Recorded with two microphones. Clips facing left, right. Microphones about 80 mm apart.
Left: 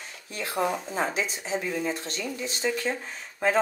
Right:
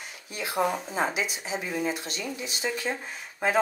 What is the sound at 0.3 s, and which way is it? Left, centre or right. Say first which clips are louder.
Speech: right 1 dB; centre.